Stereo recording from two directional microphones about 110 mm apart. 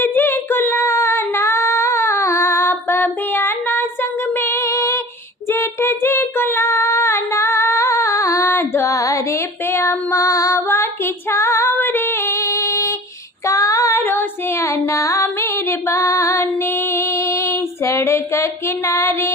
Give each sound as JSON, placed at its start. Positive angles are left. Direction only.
{"t": 0.0, "sound": "female singing", "side_deg": 20}
{"t": 9.7, "sound": "child singing", "side_deg": 25}
{"t": 11.3, "sound": "female singing", "side_deg": 25}
{"t": 18.9, "sound": "music", "side_deg": 25}